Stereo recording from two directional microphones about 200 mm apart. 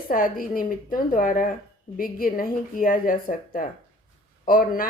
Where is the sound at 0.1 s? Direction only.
45° left (ahead or behind).